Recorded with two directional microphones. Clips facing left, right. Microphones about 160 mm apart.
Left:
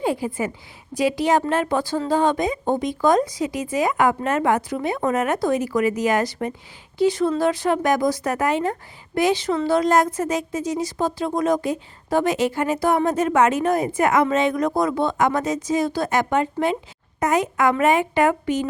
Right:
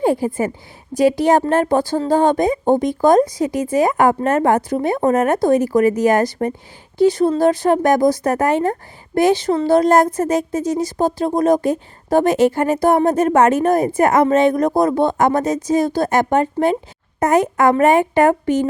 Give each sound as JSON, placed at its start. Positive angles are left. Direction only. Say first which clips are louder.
{"t": 0.0, "sound": "a woman's voice", "louder": "right 6 dB", "side_deg": -45}